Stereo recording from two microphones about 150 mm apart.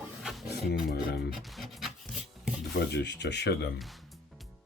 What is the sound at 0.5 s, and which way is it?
Speech, 90° left.